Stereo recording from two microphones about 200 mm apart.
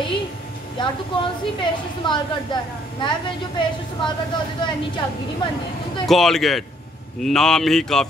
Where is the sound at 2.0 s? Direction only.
25° left (ahead or behind).